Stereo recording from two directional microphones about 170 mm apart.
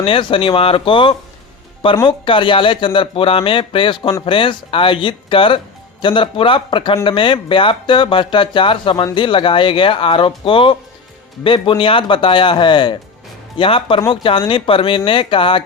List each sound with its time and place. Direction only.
0.0 s speech: 30° left (ahead or behind)